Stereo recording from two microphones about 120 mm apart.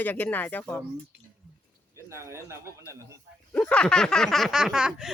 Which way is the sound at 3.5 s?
10° left (ahead or behind).